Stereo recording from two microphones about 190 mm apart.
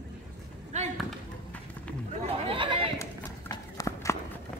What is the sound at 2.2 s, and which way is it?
Chatter, 25° right (ahead or behind).